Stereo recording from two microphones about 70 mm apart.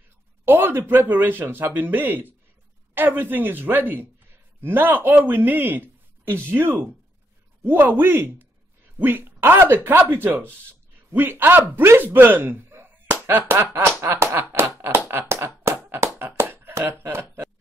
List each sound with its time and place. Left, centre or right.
0.5 s a man's voice: right
13.7 s speech: right
14.4 s a sound: right